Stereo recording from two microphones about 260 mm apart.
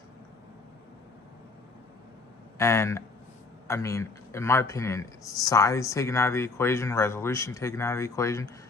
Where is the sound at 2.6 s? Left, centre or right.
Centre.